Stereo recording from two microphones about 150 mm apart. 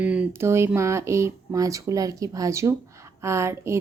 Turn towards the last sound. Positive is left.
turn(degrees=-20)  # may be behind; listen again after turning